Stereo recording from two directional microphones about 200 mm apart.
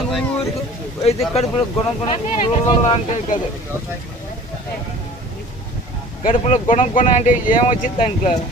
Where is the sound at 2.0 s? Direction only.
30° left (ahead or behind).